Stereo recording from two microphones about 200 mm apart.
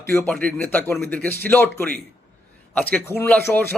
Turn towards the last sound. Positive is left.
turn(degrees=10)  # may be behind; listen again after turning